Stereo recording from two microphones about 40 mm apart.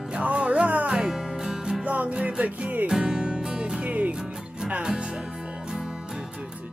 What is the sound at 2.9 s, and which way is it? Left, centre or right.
Music, centre.